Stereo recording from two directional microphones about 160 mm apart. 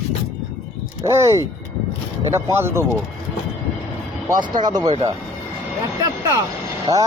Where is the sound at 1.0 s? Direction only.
20° right (ahead or behind).